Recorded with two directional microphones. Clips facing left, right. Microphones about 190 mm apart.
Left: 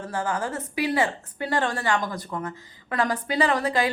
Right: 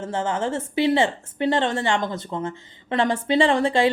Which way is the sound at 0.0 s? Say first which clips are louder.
Right 3 dB; 25° right (ahead or behind).